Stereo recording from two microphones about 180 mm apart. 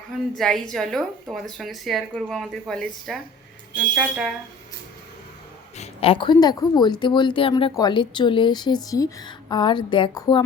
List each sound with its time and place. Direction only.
0.3 s a woman's voice: centre (ahead or behind)
5.7 s speech: 35° left (ahead or behind)